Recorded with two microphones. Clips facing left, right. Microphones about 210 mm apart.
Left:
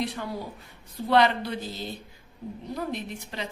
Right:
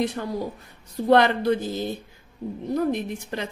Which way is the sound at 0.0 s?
45° right (ahead or behind).